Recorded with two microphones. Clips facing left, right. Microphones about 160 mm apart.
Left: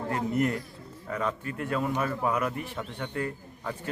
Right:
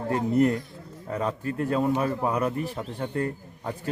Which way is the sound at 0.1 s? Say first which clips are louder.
Right 6 dB; 35° right (ahead or behind).